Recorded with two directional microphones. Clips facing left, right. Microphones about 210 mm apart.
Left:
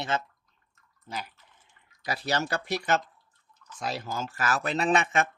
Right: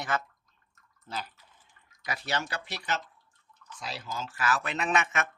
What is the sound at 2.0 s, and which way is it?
Speech, 35° left (ahead or behind).